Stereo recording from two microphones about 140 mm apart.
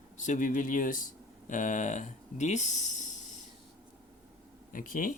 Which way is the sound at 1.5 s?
65° left (ahead or behind).